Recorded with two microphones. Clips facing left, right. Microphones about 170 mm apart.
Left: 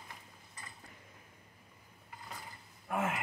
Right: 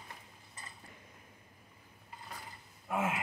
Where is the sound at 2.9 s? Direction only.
5° right (ahead or behind).